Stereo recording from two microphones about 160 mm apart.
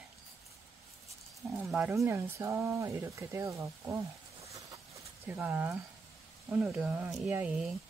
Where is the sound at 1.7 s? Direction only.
15° right (ahead or behind).